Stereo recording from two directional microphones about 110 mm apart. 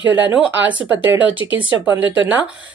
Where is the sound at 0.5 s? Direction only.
15° right (ahead or behind).